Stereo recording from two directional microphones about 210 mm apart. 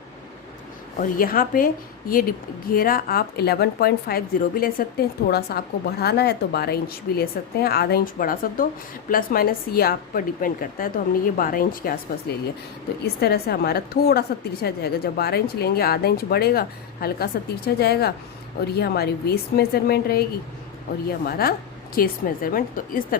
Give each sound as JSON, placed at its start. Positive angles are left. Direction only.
{"t": 1.0, "sound": "a woman's voice", "side_deg": 40}
{"t": 13.2, "sound": "a woman's voice", "side_deg": 50}
{"t": 21.2, "sound": "a woman's voice", "side_deg": 45}